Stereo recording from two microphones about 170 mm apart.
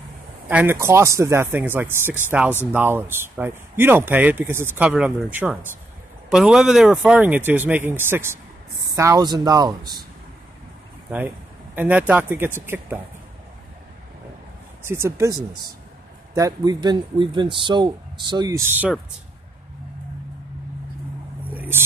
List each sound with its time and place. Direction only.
0.5 s speech: 10° right (ahead or behind)
11.7 s speech: 10° right (ahead or behind)
14.8 s speech: 15° right (ahead or behind)
21.5 s a sound: 10° right (ahead or behind)